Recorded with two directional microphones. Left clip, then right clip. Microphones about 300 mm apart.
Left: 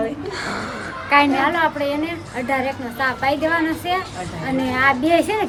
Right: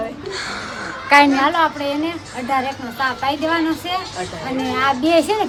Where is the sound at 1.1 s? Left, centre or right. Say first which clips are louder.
Right 4 dB; right.